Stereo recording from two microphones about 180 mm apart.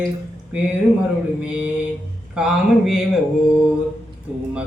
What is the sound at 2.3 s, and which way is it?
Mantra, 5° right (ahead or behind).